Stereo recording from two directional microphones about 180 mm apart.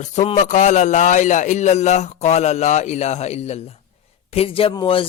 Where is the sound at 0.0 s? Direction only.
40° left (ahead or behind).